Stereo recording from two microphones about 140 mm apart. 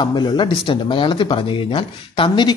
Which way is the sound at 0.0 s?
30° left (ahead or behind).